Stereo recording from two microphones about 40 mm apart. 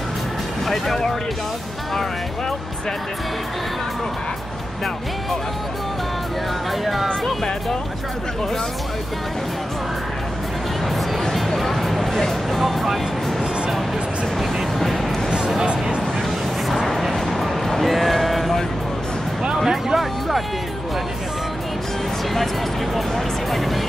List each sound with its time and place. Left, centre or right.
0.7 s speech: centre
6.8 s speech: centre
11.3 s music: centre
14.4 s music: centre
15.6 s music: right
16.6 s music: centre
17.1 s a sound: centre
19.6 s speech: centre
22.9 s speech: centre